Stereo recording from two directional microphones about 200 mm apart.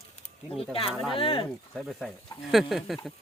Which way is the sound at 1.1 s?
25° left (ahead or behind).